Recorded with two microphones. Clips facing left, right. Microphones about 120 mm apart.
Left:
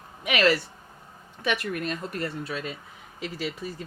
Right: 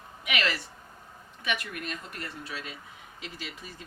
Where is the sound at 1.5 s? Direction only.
40° left (ahead or behind).